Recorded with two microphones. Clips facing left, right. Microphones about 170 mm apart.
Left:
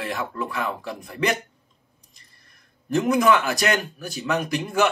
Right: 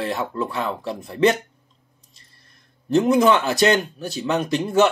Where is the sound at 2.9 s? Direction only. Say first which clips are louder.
Right 3 dB; 25° right (ahead or behind).